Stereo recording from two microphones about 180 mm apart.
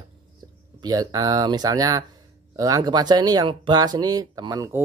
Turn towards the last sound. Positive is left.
turn(degrees=-20)  # may be behind; listen again after turning